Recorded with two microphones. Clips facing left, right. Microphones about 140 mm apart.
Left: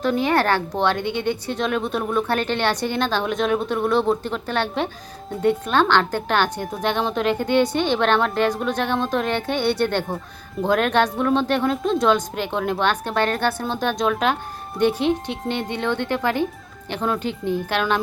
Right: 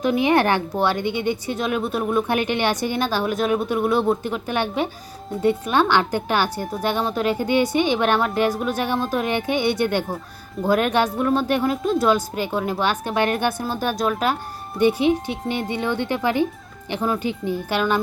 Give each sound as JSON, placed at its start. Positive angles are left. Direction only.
{"t": 0.0, "sound": "speech", "side_deg": -15}